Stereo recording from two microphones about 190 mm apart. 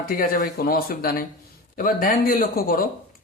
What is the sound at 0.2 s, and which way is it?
Speech, 50° left (ahead or behind).